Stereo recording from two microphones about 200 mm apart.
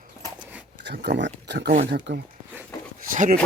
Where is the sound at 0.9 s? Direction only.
60° right (ahead or behind).